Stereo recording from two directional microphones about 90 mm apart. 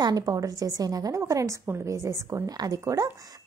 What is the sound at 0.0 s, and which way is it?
A woman's voice, 45° right (ahead or behind).